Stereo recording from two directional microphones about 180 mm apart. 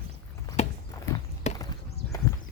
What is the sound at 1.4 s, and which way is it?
Chop, 40° left (ahead or behind).